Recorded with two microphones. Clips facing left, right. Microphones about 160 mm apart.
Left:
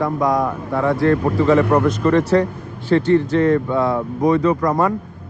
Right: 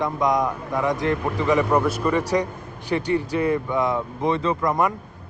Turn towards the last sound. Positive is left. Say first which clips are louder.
# left 5 dB
turn(degrees=-20)  # may be behind; listen again after turning